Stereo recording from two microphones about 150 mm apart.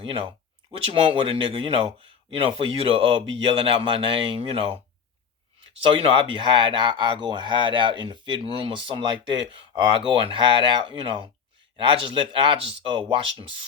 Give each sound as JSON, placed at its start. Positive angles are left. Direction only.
{"t": 0.0, "sound": "speech", "side_deg": -35}
{"t": 5.8, "sound": "speech", "side_deg": -40}